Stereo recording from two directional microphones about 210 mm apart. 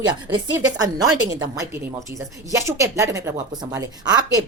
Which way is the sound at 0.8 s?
20° right (ahead or behind).